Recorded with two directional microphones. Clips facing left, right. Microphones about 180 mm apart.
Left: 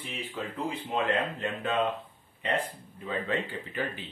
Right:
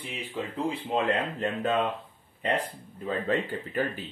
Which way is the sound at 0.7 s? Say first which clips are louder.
Right 2 dB; 35° right (ahead or behind).